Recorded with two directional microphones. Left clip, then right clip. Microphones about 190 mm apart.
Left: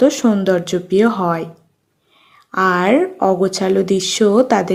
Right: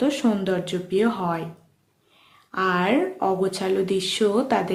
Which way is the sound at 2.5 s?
35° left (ahead or behind).